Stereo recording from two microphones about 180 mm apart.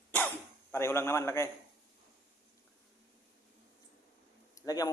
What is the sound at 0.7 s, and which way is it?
Speech, 15° left (ahead or behind).